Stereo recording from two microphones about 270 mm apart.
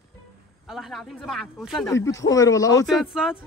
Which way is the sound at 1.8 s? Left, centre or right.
Centre.